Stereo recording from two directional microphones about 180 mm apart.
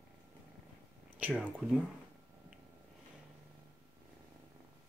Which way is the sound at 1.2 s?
5° right (ahead or behind).